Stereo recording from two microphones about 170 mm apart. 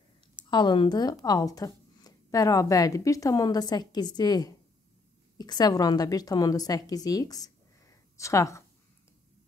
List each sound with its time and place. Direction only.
0.5 s a woman's voice: 25° left (ahead or behind)